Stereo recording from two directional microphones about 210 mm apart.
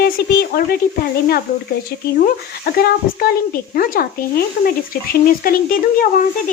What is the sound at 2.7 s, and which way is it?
Speech, 45° left (ahead or behind).